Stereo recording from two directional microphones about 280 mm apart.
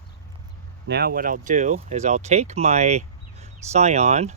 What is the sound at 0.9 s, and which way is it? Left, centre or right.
Speech, right.